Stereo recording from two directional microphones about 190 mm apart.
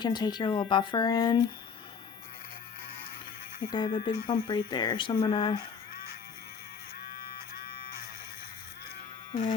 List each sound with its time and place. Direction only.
0.0 s speech: 20° left (ahead or behind)
3.7 s speech: 25° left (ahead or behind)
9.3 s speech: 40° left (ahead or behind)